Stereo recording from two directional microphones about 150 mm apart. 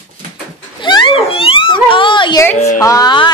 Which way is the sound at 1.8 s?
35° left (ahead or behind).